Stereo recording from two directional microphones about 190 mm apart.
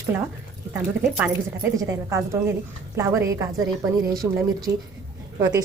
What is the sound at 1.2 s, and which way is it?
A woman's voice, 15° right (ahead or behind).